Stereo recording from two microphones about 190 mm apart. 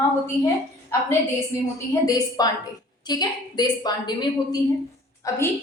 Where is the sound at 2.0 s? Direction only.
20° left (ahead or behind).